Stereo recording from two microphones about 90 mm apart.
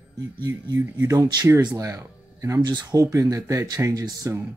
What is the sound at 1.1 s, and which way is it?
Speech, 45° right (ahead or behind).